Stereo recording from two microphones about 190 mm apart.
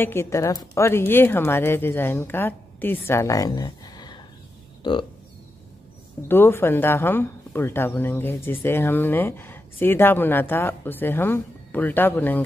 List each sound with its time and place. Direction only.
0.0 s speech: 15° left (ahead or behind)
6.2 s speech: 10° left (ahead or behind)